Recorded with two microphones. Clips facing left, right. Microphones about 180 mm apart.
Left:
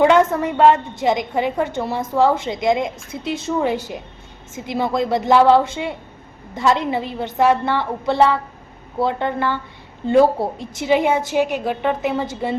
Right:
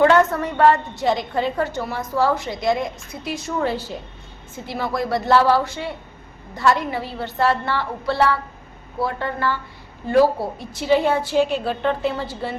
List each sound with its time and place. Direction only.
0.0 s a woman's voice: 15° left (ahead or behind)